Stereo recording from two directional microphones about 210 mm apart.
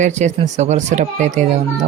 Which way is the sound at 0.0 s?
35° right (ahead or behind).